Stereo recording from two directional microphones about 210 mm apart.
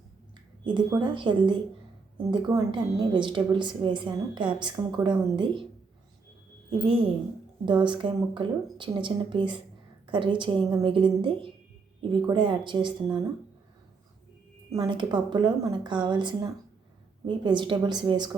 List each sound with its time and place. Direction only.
0.6 s a woman's voice: 20° right (ahead or behind)
6.7 s a woman's voice: 25° right (ahead or behind)
14.7 s a woman's voice: 20° right (ahead or behind)